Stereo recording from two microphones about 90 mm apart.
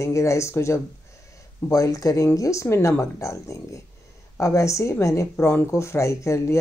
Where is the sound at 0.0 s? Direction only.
35° left (ahead or behind).